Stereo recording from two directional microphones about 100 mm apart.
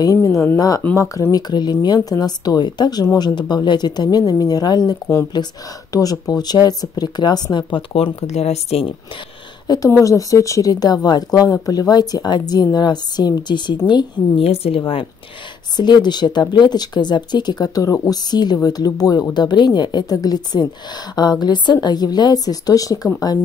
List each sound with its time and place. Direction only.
0.0 s speech: 35° left (ahead or behind)
7.9 s speech: 85° left
9.8 s speech: 30° left (ahead or behind); by 14.4 s 50° left (ahead or behind)
14.4 s speech: 90° left
15.7 s speech: 45° left (ahead or behind)